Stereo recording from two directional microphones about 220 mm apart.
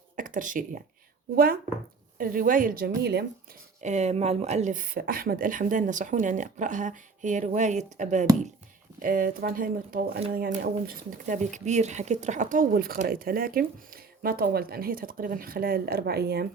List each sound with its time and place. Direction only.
0.2 s speech: 35° right (ahead or behind)
2.1 s speech: 40° right (ahead or behind)
3.8 s speech: 30° right (ahead or behind); by 16.5 s 45° right (ahead or behind)